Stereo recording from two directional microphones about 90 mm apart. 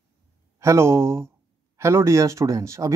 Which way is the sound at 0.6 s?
30° right (ahead or behind).